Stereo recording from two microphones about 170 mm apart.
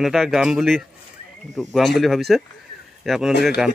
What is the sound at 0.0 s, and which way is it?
Speech, centre (ahead or behind).